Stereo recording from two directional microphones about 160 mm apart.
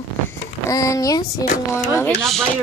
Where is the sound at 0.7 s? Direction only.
20° left (ahead or behind).